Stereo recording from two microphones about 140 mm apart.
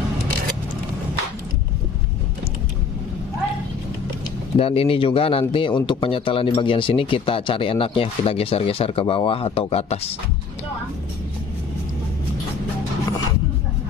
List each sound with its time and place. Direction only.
4.6 s speech: 45° left (ahead or behind)